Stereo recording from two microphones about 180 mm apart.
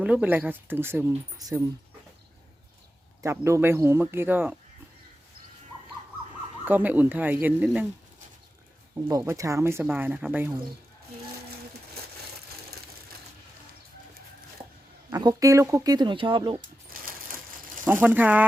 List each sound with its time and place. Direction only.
0.0 s speech: 5° right (ahead or behind)
3.2 s speech: 15° right (ahead or behind)
6.7 s speech: 10° right (ahead or behind)
9.0 s speech: 15° right (ahead or behind)
15.1 s speech: 20° right (ahead or behind)
16.9 s a sound: 50° right (ahead or behind)
17.8 s speech: 10° right (ahead or behind)